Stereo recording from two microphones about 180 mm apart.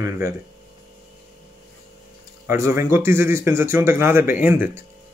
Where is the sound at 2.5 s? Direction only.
15° right (ahead or behind).